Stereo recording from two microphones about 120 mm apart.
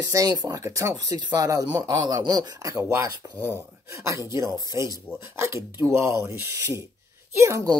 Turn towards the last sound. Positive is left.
turn(degrees=-25)  # may be behind; listen again after turning